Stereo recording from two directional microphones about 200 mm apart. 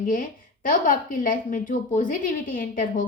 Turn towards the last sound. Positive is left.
turn(degrees=45)  # may be behind; listen again after turning